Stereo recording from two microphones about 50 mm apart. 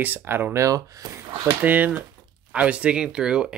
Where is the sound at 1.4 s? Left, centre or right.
Right.